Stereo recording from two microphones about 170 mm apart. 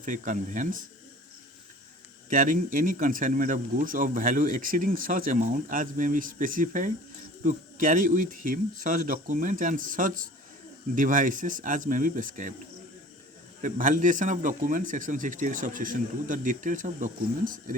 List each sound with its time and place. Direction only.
0.0 s speech: 50° right (ahead or behind)
2.3 s speech: 50° right (ahead or behind)
13.6 s speech: 50° right (ahead or behind)